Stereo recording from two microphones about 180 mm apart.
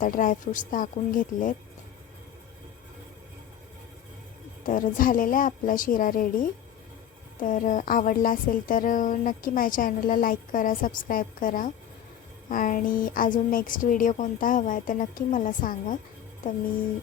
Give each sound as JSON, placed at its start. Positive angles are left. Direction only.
{"t": 0.0, "sound": "a woman's voice", "side_deg": 45}
{"t": 4.6, "sound": "a woman's voice", "side_deg": 50}